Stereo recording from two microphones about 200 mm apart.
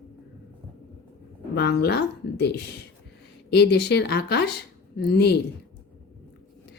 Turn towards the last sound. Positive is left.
turn(degrees=55)  # may be behind; listen again after turning